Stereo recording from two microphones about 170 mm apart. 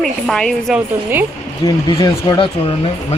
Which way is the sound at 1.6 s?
20° left (ahead or behind).